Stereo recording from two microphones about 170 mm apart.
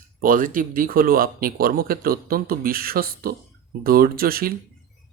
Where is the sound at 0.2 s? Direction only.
55° right (ahead or behind).